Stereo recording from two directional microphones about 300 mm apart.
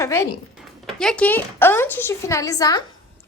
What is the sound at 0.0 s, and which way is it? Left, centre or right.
A woman's voice, centre.